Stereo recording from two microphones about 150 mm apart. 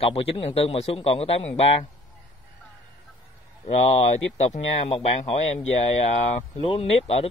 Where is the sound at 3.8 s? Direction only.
45° left (ahead or behind).